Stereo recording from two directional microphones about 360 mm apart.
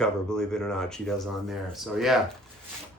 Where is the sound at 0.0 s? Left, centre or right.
Centre.